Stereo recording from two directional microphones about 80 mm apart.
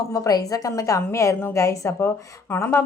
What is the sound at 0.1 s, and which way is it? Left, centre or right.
A woman's voice, left.